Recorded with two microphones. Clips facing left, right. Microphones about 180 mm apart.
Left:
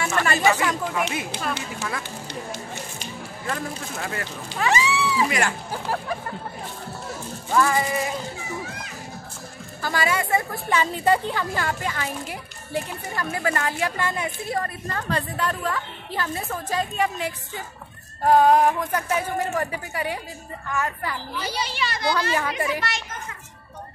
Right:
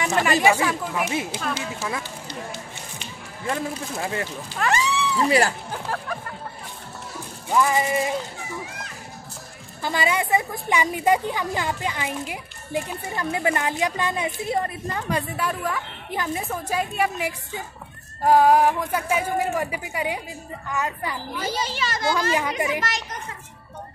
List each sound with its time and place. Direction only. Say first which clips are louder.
0.2 s a woman's voice: right 2 dB; 10° right (ahead or behind)
3.4 s speech: right 3 dB; 25° right (ahead or behind)
4.6 s speech: left 1 dB; centre (ahead or behind)
7.4 s a woman's voice: right 1 dB; 15° right (ahead or behind)
9.8 s a woman's voice: right 1 dB; 20° right (ahead or behind)
21.4 s a child's voice: right 2 dB; 45° right (ahead or behind)
22.3 s speech: right 1 dB; 15° right (ahead or behind)